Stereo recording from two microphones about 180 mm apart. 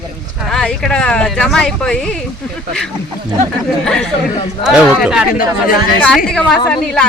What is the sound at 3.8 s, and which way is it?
Speech, 5° left (ahead or behind).